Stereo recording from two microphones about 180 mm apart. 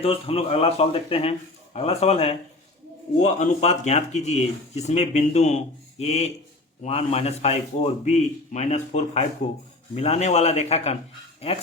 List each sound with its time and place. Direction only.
0.0 s speech: 35° left (ahead or behind)